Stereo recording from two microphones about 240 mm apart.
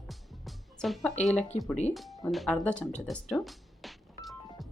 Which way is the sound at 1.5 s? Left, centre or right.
Left.